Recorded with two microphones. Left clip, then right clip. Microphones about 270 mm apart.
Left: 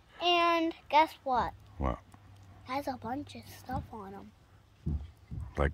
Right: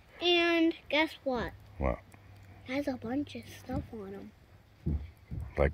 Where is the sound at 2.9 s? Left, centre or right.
Left.